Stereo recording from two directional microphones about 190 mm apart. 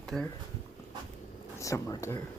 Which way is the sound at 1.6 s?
15° left (ahead or behind).